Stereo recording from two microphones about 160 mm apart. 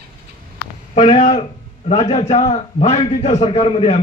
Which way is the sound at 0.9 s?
45° left (ahead or behind).